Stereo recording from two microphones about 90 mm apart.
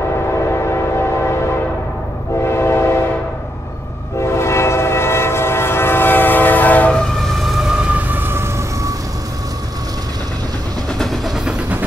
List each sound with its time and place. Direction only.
0.5 s train: 30° left (ahead or behind)
2.4 s train: 30° left (ahead or behind)
4.2 s train: 30° left (ahead or behind); by 7.5 s 5° left (ahead or behind)
7.9 s a sound: 20° right (ahead or behind)
11.0 s train: centre (ahead or behind)